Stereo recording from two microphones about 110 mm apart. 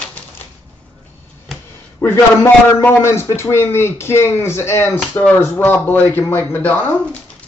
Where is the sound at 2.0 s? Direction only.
25° left (ahead or behind).